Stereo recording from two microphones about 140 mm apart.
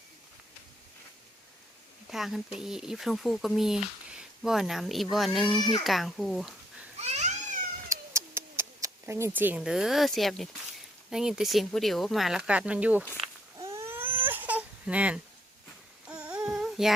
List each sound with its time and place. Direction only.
2.0 s speech: centre (ahead or behind)
7.0 s babbling: 55° right (ahead or behind)
7.9 s a sound: 20° right (ahead or behind); by 10.5 s centre (ahead or behind)
11.1 s speech: 5° right (ahead or behind)
13.6 s baby cry: 20° right (ahead or behind)
16.0 s child singing: 5° right (ahead or behind)